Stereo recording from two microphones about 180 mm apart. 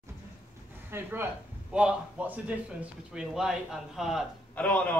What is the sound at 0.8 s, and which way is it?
A man's voice, 10° right (ahead or behind).